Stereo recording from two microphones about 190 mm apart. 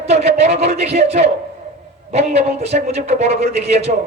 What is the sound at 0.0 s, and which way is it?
A man's voice, 35° right (ahead or behind).